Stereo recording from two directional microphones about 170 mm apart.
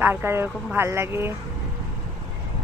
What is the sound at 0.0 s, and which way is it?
Speech, 15° right (ahead or behind).